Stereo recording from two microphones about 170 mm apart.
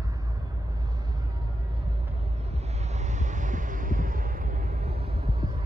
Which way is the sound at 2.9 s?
45° right (ahead or behind).